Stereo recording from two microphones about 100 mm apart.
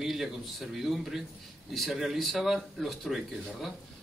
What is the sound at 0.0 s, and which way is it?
A man's voice, centre (ahead or behind).